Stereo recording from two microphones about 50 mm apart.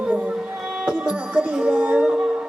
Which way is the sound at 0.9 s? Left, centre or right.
Right.